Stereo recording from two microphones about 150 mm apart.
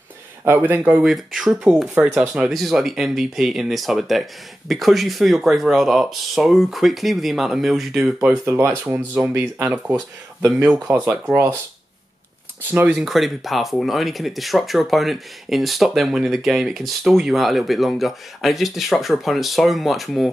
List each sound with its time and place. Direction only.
0.5 s speech: 10° right (ahead or behind)
1.0 s speech: centre (ahead or behind)
8.8 s speech: 15° right (ahead or behind)
10.6 s speech: 5° right (ahead or behind)
12.7 s speech: 5° right (ahead or behind)